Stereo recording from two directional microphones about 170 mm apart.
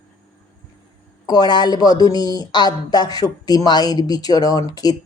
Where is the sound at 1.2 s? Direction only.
25° left (ahead or behind).